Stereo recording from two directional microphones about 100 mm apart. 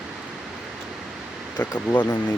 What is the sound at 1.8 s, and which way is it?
Speech, 15° left (ahead or behind).